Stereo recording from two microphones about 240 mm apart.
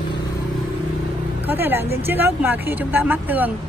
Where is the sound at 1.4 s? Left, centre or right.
Centre.